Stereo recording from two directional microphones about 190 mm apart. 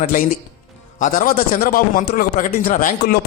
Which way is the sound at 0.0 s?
45° left (ahead or behind).